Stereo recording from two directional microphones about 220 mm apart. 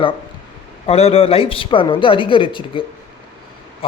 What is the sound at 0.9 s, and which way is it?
Speech, 25° left (ahead or behind).